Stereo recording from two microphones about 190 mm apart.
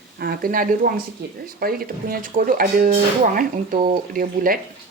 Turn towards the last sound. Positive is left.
turn(degrees=-45)  # may be behind; listen again after turning